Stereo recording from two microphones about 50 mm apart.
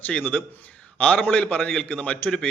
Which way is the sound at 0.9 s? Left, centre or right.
Left.